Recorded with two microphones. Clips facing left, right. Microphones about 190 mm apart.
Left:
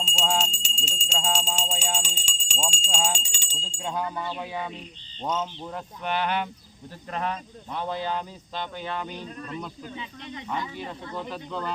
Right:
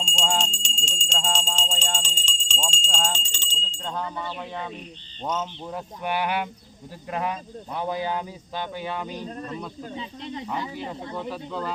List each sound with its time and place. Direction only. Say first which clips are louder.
0.0 s jingle bell: even; 5° left (ahead or behind)
5.2 s speech: even; 5° right (ahead or behind)
9.1 s speech: right 2 dB; 35° right (ahead or behind)
11.2 s speech: right 1 dB; 5° right (ahead or behind)